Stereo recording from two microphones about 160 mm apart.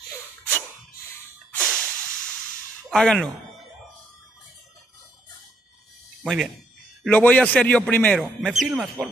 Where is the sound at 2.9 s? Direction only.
5° left (ahead or behind).